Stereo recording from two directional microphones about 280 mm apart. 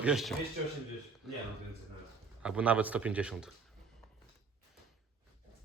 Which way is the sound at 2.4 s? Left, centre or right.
Centre.